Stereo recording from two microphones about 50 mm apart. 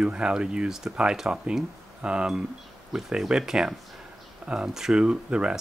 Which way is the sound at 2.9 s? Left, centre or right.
Centre.